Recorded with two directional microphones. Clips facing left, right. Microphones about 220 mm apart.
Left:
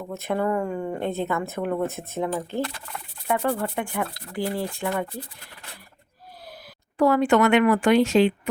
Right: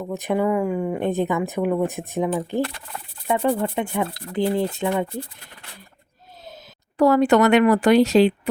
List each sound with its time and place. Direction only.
0.0 s speech: 15° right (ahead or behind)
7.0 s speech: 40° right (ahead or behind)